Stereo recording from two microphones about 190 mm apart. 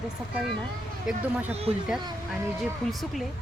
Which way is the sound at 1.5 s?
30° right (ahead or behind).